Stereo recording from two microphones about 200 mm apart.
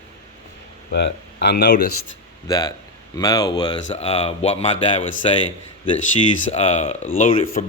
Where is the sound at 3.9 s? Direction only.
30° left (ahead or behind).